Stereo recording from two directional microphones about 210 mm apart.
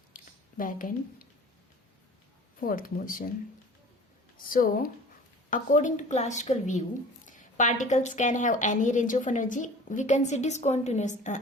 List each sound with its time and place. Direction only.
0.1 s a sound: 40° left (ahead or behind)
2.6 s a woman's voice: 40° left (ahead or behind)
4.4 s a woman's voice: 40° left (ahead or behind)